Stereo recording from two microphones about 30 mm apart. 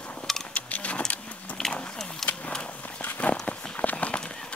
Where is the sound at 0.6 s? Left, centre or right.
Left.